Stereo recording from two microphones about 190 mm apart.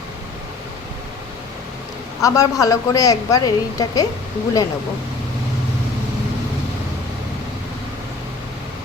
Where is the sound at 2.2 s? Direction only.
20° left (ahead or behind).